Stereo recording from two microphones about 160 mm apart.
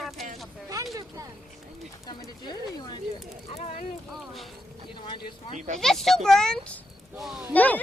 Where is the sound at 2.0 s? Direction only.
25° left (ahead or behind).